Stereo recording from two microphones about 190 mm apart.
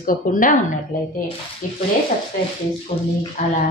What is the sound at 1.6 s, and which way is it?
Speech, 45° left (ahead or behind).